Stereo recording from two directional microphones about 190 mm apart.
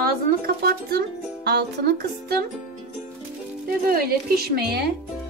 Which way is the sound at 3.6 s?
55° right (ahead or behind).